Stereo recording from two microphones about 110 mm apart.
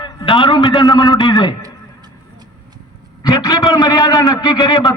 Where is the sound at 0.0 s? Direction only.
45° left (ahead or behind).